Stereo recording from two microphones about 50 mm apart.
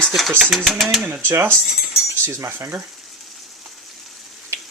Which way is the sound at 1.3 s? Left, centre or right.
Right.